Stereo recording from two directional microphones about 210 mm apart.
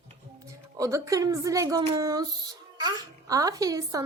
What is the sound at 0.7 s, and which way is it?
A child's voice, 15° right (ahead or behind).